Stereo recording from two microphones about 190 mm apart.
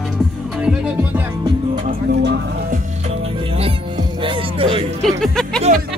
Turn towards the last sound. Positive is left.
turn(degrees=0)  # may be behind; listen again after turning